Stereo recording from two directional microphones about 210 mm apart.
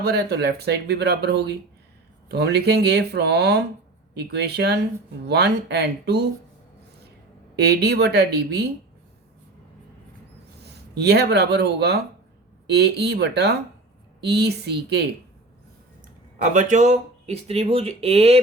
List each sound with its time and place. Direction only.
0.0 s speech: 50° right (ahead or behind)
7.5 s speech: 50° right (ahead or behind)
10.6 s speech: 50° right (ahead or behind)
16.4 s speech: 35° right (ahead or behind)